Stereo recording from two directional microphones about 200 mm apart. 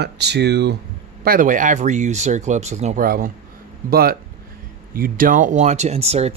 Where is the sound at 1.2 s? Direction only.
45° right (ahead or behind).